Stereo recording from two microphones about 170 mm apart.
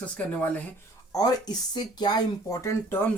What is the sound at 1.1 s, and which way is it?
Speech, 25° left (ahead or behind).